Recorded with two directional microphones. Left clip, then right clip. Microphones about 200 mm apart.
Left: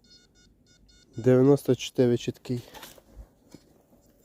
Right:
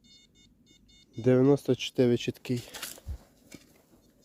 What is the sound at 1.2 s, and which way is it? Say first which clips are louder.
Speech: left 3 dB; 10° left (ahead or behind).